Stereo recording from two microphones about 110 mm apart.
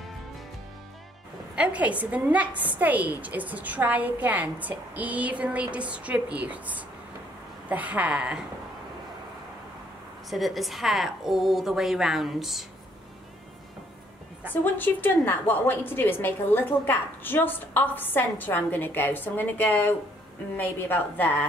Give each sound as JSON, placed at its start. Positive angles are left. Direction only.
{"t": 1.5, "sound": "a woman's voice", "side_deg": -10}
{"t": 10.3, "sound": "a woman's voice", "side_deg": 0}
{"t": 14.5, "sound": "a woman's voice", "side_deg": 15}